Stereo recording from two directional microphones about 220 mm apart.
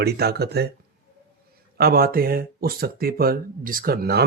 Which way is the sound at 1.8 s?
45° right (ahead or behind).